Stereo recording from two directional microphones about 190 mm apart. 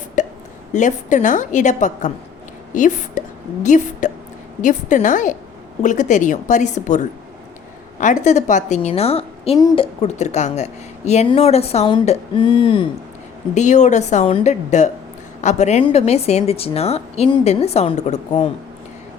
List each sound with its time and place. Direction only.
0.2 s hiccup: 40° left (ahead or behind)
0.7 s a woman's voice: 40° left (ahead or behind)
13.5 s a woman's voice: 40° left (ahead or behind)